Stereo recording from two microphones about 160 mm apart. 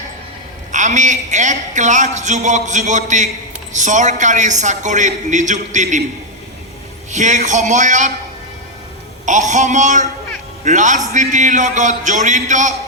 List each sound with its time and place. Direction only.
0.7 s a man's voice: 50° right (ahead or behind)
7.1 s a man's voice: 50° right (ahead or behind)
9.2 s a man's voice: 50° right (ahead or behind)